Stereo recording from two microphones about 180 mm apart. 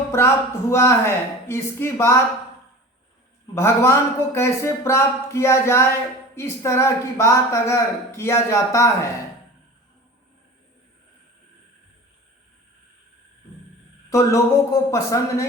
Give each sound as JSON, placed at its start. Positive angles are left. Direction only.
{"t": 0.1, "sound": "speech", "side_deg": 15}
{"t": 3.5, "sound": "speech", "side_deg": 15}
{"t": 14.1, "sound": "speech", "side_deg": 15}